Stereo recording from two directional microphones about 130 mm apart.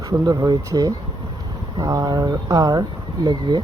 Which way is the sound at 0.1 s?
30° right (ahead or behind).